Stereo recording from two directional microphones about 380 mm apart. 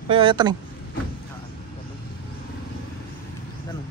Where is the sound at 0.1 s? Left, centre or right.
Centre.